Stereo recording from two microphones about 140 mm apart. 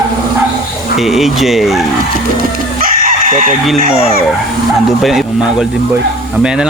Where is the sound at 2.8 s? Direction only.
90° right.